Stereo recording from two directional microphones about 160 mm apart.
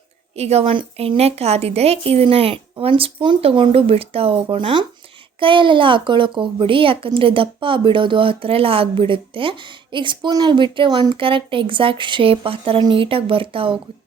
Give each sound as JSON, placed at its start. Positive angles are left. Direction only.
{"t": 0.3, "sound": "a woman's voice", "side_deg": -40}